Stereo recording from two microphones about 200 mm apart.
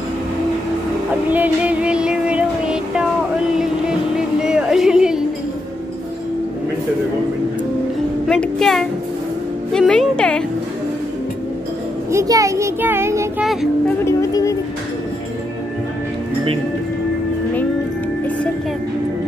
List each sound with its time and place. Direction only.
1.3 s music: 5° right (ahead or behind)
4.4 s music: 5° right (ahead or behind)
8.3 s speech: 5° left (ahead or behind)
9.7 s music: centre (ahead or behind)
12.1 s child singing: 15° right (ahead or behind)
13.4 s child singing: centre (ahead or behind)
14.0 s speech: 15° left (ahead or behind)